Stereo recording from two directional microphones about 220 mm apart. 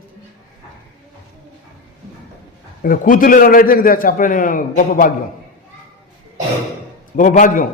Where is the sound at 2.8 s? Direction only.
40° left (ahead or behind).